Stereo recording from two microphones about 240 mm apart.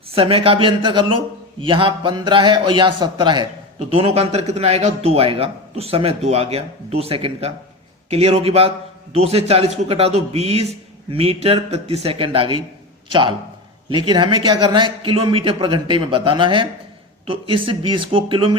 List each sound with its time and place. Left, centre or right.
0.1 s a man's voice: right